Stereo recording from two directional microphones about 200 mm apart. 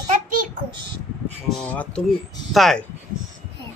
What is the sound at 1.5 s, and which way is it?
Speech, 5° left (ahead or behind).